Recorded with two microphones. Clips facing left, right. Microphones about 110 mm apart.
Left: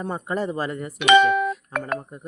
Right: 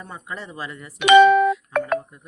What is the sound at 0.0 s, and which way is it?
Speech, 45° left (ahead or behind).